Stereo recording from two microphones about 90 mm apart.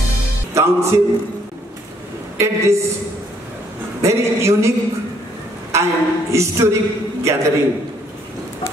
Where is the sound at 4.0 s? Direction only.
35° right (ahead or behind).